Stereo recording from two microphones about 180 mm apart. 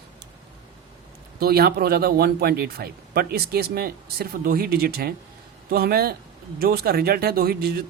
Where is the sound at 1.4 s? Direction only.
60° right (ahead or behind).